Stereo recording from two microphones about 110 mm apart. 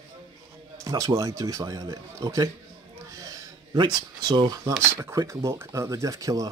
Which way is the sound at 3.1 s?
35° right (ahead or behind).